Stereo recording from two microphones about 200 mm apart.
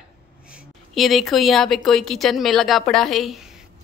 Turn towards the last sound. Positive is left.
turn(degrees=0)  # may be behind; listen again after turning